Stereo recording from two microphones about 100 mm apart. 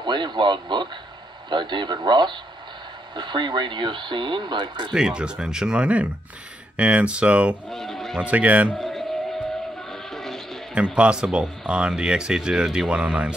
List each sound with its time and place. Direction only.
0.0 s speech: 50° right (ahead or behind)
4.9 s speech: 10° right (ahead or behind)
7.7 s speech: 5° left (ahead or behind)
8.2 s speech: 15° right (ahead or behind)
8.7 s music: 5° left (ahead or behind)
11.0 s speech: 10° right (ahead or behind)